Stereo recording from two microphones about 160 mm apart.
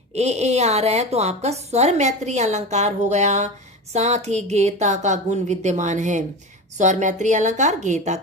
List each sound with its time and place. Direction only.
0.1 s a woman's voice: 40° right (ahead or behind)